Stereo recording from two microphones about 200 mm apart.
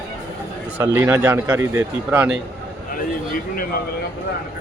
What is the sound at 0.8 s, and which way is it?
A man's voice, 15° right (ahead or behind).